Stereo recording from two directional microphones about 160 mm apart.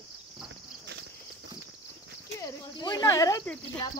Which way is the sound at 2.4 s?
25° left (ahead or behind).